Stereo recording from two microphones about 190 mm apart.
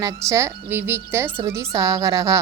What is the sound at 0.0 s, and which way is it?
A woman's voice, 15° right (ahead or behind).